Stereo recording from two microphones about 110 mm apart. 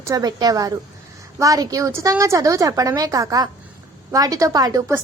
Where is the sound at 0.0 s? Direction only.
35° right (ahead or behind).